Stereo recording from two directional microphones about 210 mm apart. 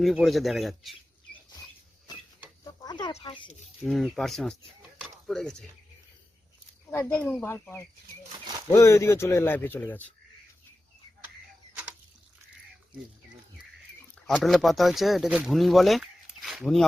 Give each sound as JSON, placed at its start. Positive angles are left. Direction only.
{"t": 0.0, "sound": "speech", "side_deg": 0}
{"t": 2.8, "sound": "speech", "side_deg": 20}
{"t": 3.4, "sound": "speech", "side_deg": 0}
{"t": 6.9, "sound": "a man's voice", "side_deg": 10}
{"t": 14.3, "sound": "speech", "side_deg": 0}